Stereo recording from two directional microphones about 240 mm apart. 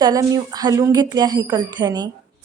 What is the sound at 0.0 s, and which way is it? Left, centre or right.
Speech, centre.